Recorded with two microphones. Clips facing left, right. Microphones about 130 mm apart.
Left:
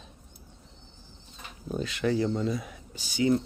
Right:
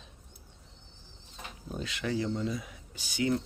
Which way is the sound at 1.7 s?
45° left (ahead or behind).